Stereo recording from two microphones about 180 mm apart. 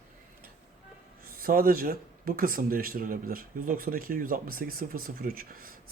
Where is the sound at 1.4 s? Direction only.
55° right (ahead or behind).